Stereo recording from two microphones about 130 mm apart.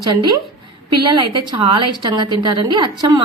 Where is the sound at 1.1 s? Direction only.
35° right (ahead or behind).